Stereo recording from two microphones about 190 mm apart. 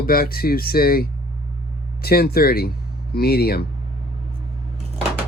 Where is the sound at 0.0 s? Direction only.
50° left (ahead or behind).